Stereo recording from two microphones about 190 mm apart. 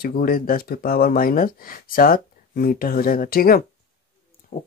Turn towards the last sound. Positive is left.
turn(degrees=50)  # may be behind; listen again after turning